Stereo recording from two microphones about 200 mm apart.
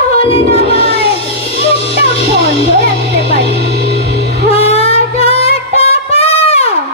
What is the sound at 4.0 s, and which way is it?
Music, 55° right (ahead or behind).